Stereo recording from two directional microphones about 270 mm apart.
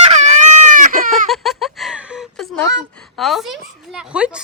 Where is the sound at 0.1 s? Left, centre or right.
Right.